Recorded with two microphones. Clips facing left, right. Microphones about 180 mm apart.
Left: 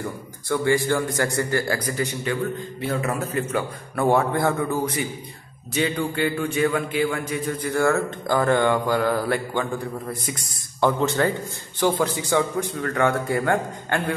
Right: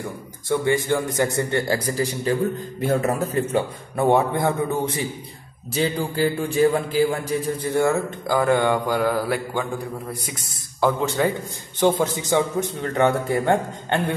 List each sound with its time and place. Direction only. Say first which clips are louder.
0.5 s speech: even; 20° right (ahead or behind)
2.8 s a man's voice: right 5 dB; 40° right (ahead or behind)
3.9 s a man's voice: right 1 dB; 20° right (ahead or behind)
8.3 s speech: right 1 dB; 10° right (ahead or behind)
11.8 s speech: right 2 dB; 20° right (ahead or behind)